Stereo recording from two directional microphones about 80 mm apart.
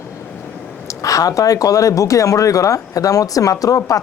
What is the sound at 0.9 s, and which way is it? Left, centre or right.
Speech, left.